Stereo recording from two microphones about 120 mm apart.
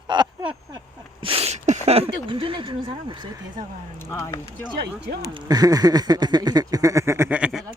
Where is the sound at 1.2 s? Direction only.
50° right (ahead or behind).